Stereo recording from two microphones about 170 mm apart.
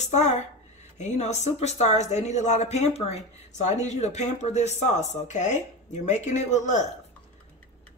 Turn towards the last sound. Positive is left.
turn(degrees=45)  # may be behind; listen again after turning